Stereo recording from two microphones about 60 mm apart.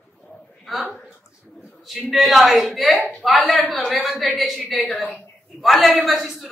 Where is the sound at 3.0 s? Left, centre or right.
Centre.